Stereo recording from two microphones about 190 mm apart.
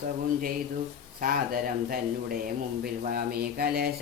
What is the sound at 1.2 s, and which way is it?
Speech, 50° right (ahead or behind).